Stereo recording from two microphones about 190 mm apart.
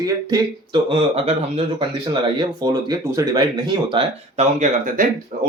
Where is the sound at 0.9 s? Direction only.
30° right (ahead or behind).